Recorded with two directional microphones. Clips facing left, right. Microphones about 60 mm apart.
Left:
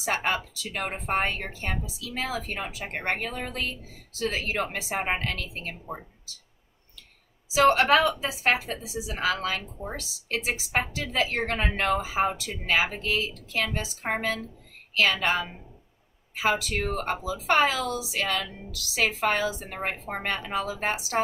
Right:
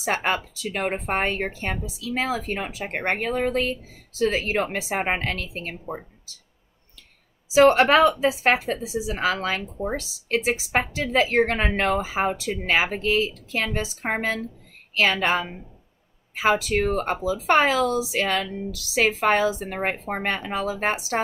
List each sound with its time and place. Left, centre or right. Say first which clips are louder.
0.1 s a woman's voice: right 3 dB; right
7.5 s a woman's voice: right 4 dB; right
16.5 s a woman's voice: right 6 dB; right